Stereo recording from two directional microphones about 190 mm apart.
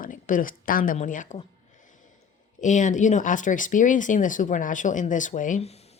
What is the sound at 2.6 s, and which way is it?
Speech, 40° left (ahead or behind).